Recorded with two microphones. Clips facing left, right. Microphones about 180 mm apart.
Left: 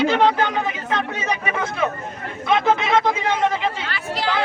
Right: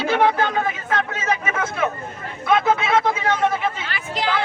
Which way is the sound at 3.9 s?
20° right (ahead or behind).